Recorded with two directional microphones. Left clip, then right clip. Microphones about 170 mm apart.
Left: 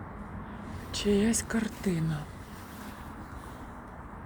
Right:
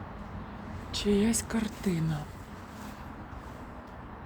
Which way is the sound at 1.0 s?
25° right (ahead or behind).